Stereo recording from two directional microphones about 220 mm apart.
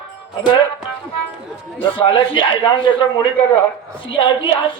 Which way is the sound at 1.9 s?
20° left (ahead or behind).